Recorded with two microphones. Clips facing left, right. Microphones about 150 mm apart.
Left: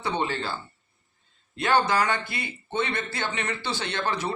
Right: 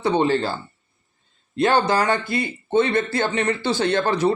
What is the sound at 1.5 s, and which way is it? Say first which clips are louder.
Speech: right 4 dB; 35° right (ahead or behind).